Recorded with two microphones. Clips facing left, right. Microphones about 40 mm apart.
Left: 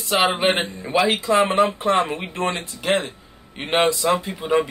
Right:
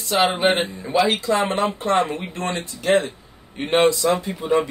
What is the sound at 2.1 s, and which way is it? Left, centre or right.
Speech, left.